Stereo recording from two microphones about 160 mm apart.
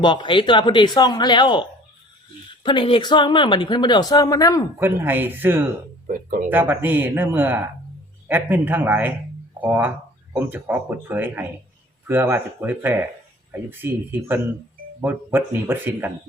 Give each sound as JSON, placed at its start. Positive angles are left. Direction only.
{"t": 0.0, "sound": "speech", "side_deg": 30}
{"t": 2.6, "sound": "speech", "side_deg": 30}
{"t": 4.8, "sound": "speech", "side_deg": -10}
{"t": 6.1, "sound": "speech", "side_deg": -55}
{"t": 6.5, "sound": "speech", "side_deg": -10}